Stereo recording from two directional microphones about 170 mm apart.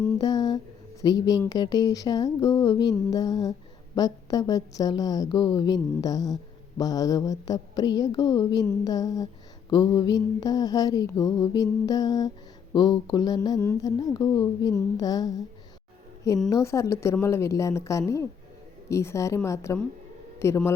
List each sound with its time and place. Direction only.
0.2 s humming: 20° left (ahead or behind)
1.0 s a woman's voice: 20° left (ahead or behind)
16.5 s a woman's voice: 15° left (ahead or behind)